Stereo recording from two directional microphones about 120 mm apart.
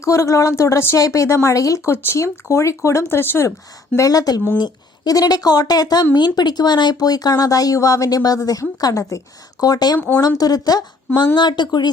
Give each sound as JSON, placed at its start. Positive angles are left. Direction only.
{"t": 0.0, "sound": "speech", "side_deg": 25}